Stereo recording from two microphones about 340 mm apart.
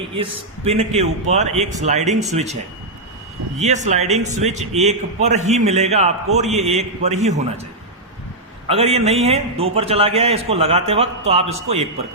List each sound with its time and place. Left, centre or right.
0.2 s a man's voice: centre
3.6 s a man's voice: centre
8.6 s a man's voice: centre